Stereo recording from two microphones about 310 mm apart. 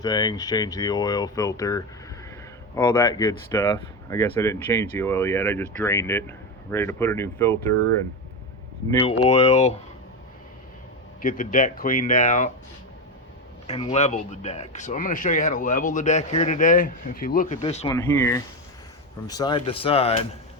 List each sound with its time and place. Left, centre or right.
0.0 s speech: centre
8.9 s speech: centre
11.2 s speech: left
13.7 s speech: centre
17.8 s speech: centre